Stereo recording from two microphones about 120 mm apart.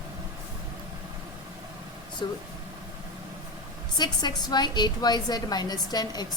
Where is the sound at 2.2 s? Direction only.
40° left (ahead or behind).